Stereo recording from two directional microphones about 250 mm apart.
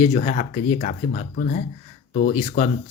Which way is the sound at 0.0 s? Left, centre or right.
Left.